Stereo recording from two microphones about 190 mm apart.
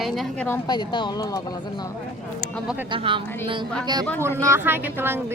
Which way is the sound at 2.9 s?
25° right (ahead or behind).